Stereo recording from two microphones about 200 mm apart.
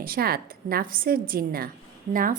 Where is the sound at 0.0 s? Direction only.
50° right (ahead or behind).